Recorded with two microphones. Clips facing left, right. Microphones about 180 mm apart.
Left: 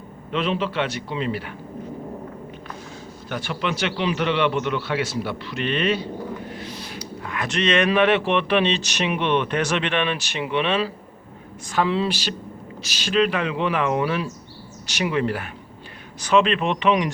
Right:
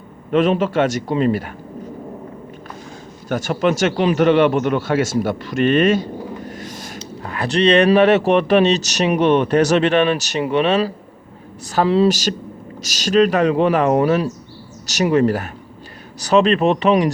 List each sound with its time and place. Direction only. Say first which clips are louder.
0.3 s speech: right 8 dB; 45° right (ahead or behind)
3.2 s a man's voice: right 9 dB; 45° right (ahead or behind)